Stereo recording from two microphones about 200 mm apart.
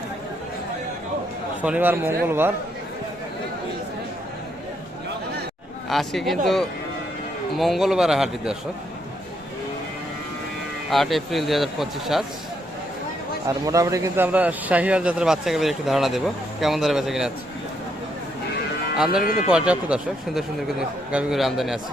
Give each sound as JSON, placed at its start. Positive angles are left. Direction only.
{"t": 1.6, "sound": "a man's voice", "side_deg": -10}
{"t": 5.9, "sound": "a man's voice", "side_deg": 0}
{"t": 10.9, "sound": "a man's voice", "side_deg": 0}
{"t": 13.5, "sound": "a man's voice", "side_deg": -15}
{"t": 19.2, "sound": "speech", "side_deg": 45}
{"t": 19.5, "sound": "a man's voice", "side_deg": -5}